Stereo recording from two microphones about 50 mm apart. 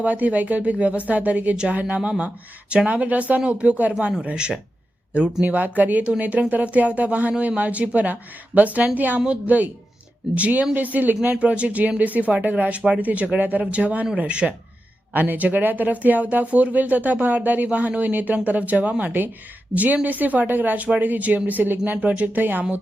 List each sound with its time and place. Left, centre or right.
0.0 s speech: right
15.1 s speech: right